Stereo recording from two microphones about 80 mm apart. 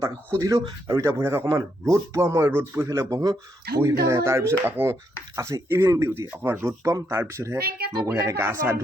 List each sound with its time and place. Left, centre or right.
0.0 s speech: right
5.4 s speech: right